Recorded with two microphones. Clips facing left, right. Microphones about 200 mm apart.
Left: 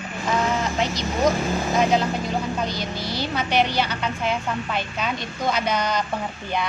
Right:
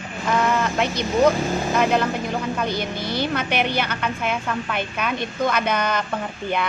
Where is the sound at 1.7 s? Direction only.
60° right (ahead or behind).